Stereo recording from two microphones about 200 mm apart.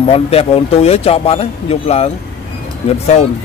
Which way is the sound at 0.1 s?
30° left (ahead or behind).